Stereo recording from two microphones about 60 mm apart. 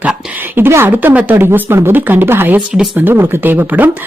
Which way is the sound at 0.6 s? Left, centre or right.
Right.